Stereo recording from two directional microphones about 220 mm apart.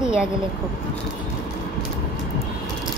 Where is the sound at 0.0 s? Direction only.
5° right (ahead or behind).